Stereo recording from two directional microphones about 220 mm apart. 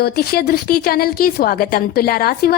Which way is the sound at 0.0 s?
45° left (ahead or behind).